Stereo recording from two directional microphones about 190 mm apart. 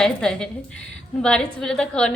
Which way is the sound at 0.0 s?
5° left (ahead or behind).